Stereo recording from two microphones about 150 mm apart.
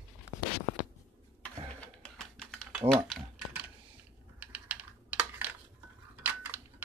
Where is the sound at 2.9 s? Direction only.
Centre (ahead or behind).